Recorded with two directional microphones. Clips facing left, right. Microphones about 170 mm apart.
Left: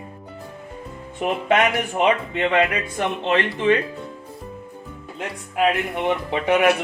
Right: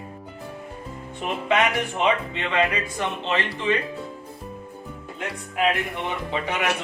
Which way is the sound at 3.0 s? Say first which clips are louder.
Left 6 dB; 60° left (ahead or behind).